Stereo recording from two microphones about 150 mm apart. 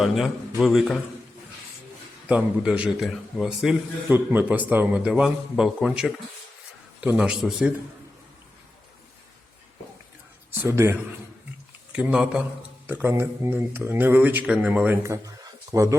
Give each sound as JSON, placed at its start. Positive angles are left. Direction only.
{"t": 0.0, "sound": "a man's voice", "side_deg": 0}
{"t": 2.2, "sound": "a man's voice", "side_deg": -5}
{"t": 10.6, "sound": "speech", "side_deg": -15}